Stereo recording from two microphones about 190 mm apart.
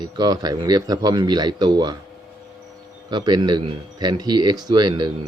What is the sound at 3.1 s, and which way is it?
Speech, 20° right (ahead or behind).